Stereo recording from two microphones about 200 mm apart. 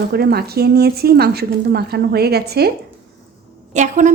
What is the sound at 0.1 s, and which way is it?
Speech, 50° right (ahead or behind).